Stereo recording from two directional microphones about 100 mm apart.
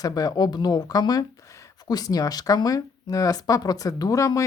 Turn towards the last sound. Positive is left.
turn(degrees=35)  # may be behind; listen again after turning